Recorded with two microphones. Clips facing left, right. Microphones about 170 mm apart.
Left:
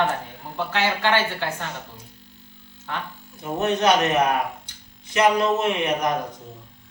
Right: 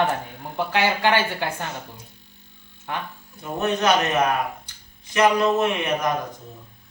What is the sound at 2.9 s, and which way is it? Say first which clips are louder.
Speech: right 1 dB; 15° right (ahead or behind).